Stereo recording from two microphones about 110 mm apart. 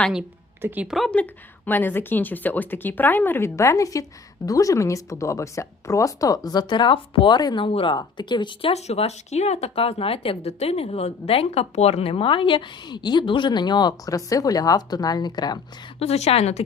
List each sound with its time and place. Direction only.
0.9 s speech: centre (ahead or behind)
1.1 s speech: 15° left (ahead or behind); by 8.7 s 45° left (ahead or behind)
8.7 s speech: 80° left; by 15.5 s 40° left (ahead or behind)
16.0 s a woman's voice: 75° left (ahead or behind)